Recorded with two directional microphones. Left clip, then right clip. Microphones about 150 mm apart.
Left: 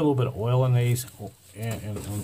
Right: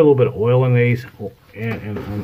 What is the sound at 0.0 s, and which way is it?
Speech, 40° left (ahead or behind).